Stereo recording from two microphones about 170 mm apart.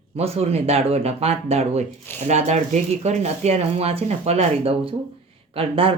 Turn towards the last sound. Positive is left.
turn(degrees=-35)  # may be behind; listen again after turning